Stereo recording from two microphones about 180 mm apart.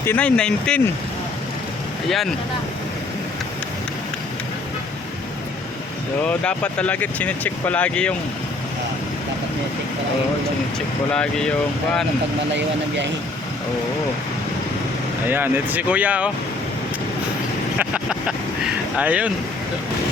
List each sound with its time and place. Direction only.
0.0 s speech: 10° left (ahead or behind)
2.0 s speech: centre (ahead or behind)
6.2 s speech: 5° left (ahead or behind)
11.1 s speech: 5° left (ahead or behind)
15.3 s speech: 10° right (ahead or behind)
17.7 s vehicle: 5° right (ahead or behind)
18.9 s speech: 5° right (ahead or behind)